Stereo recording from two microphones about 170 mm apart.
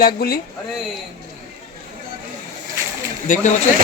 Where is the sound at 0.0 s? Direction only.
60° left (ahead or behind).